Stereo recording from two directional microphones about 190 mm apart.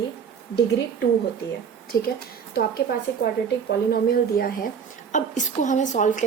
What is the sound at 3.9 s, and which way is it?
A woman's voice, 55° left (ahead or behind).